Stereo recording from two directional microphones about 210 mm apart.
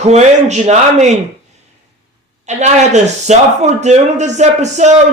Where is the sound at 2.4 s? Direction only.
35° right (ahead or behind).